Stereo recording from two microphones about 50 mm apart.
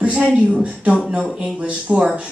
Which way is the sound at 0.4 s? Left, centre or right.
Centre.